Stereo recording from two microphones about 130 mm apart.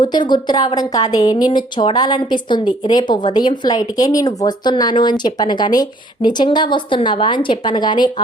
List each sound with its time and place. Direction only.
0.0 s a woman's voice: 35° left (ahead or behind)